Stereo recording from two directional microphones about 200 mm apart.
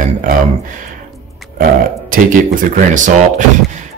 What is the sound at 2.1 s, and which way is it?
Speech, 45° right (ahead or behind).